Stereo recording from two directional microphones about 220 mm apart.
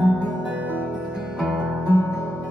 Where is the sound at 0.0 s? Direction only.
5° right (ahead or behind).